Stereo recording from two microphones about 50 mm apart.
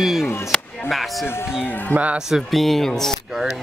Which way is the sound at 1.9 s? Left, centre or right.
Right.